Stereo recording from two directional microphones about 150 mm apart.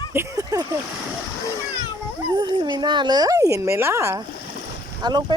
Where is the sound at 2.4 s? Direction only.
30° right (ahead or behind).